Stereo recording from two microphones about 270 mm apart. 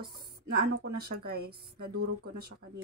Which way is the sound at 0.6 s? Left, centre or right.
Right.